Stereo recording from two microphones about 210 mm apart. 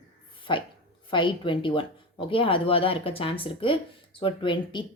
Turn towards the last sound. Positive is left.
turn(degrees=20)  # may be behind; listen again after turning